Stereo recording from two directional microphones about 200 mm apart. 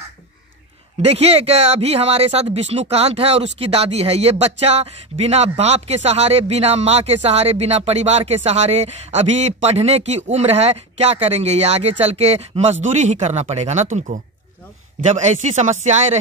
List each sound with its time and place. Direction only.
1.0 s speech: 30° right (ahead or behind)